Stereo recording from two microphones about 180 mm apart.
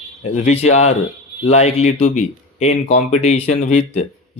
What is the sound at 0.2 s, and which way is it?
A man's voice, 35° left (ahead or behind).